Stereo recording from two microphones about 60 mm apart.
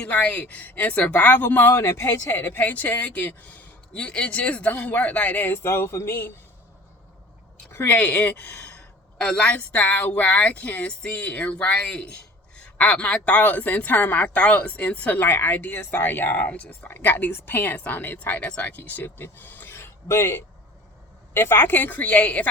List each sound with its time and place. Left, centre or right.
0.0 s speech: left
1.7 s speech: left
5.6 s speech: left
7.9 s speech: left
9.2 s speech: centre; by 19.9 s left
20.1 s speech: left